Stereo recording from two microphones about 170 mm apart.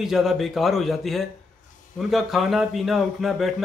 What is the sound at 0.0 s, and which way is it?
A man's voice, centre (ahead or behind).